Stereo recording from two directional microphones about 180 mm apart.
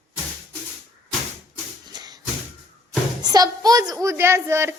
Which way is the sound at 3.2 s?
20° right (ahead or behind).